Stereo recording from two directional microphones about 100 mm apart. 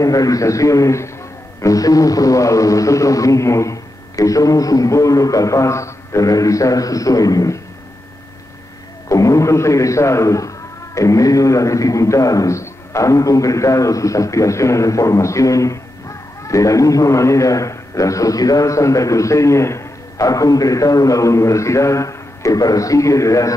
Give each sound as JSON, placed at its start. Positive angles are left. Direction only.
{"t": 0.0, "sound": "a man's voice", "side_deg": 35}
{"t": 9.1, "sound": "a man's voice", "side_deg": 30}